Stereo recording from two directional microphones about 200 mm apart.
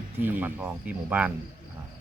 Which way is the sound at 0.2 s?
10° right (ahead or behind).